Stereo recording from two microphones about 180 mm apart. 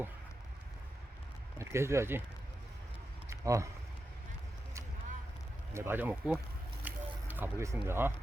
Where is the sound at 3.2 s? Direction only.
15° right (ahead or behind).